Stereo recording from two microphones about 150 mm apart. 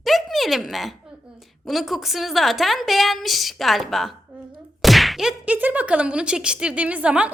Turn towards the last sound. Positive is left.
turn(degrees=-5)  # may be behind; listen again after turning